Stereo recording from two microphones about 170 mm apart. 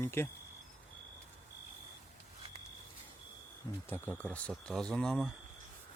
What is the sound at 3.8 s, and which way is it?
Speech, 10° left (ahead or behind).